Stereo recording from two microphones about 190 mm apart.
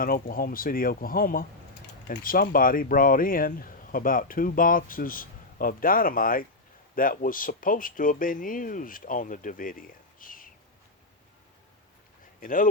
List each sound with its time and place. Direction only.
0.0 s speech: 50° left (ahead or behind)
12.4 s speech: 45° left (ahead or behind)